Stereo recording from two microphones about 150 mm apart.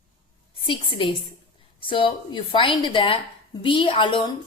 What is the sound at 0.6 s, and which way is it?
A woman's voice, 35° left (ahead or behind).